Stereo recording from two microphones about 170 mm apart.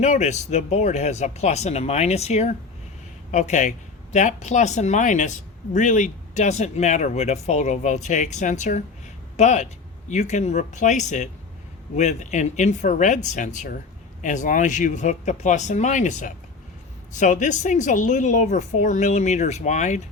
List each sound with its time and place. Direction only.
0.0 s speech: 40° left (ahead or behind)